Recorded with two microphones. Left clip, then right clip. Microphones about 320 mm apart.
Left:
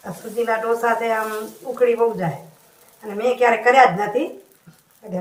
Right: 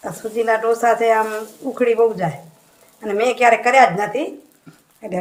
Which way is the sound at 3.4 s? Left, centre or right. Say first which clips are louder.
Right 1 dB; right.